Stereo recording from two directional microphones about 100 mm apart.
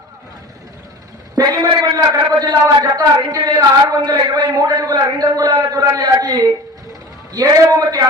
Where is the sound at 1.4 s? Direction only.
45° right (ahead or behind).